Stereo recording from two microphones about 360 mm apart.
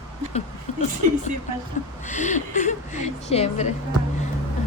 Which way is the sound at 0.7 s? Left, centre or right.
Centre.